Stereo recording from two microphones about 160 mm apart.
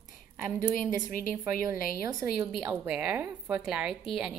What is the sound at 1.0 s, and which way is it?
Speech, 60° left (ahead or behind).